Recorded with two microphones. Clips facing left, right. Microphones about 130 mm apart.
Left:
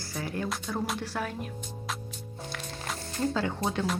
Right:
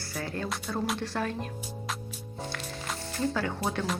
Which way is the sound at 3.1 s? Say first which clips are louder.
Left 1 dB; 20° left (ahead or behind).